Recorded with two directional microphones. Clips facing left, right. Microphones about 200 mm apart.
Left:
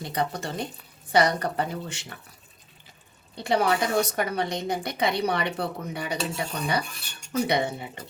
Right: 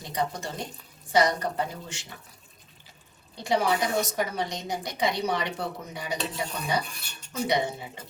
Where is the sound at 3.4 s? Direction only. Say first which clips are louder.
Left 2 dB; 60° left (ahead or behind).